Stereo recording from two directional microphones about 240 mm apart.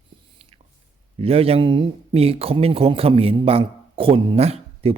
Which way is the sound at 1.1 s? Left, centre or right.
Right.